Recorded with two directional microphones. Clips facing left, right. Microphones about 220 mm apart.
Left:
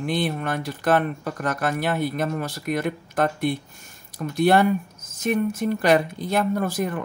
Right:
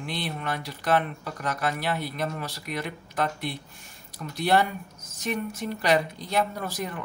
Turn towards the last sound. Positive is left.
turn(degrees=50)  # may be behind; listen again after turning